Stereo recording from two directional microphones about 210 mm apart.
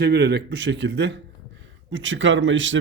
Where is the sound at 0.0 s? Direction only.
50° right (ahead or behind).